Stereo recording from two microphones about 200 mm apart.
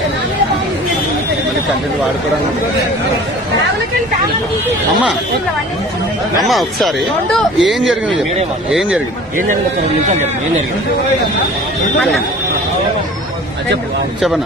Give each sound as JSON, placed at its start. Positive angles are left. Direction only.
{"t": 6.5, "sound": "speech", "side_deg": 0}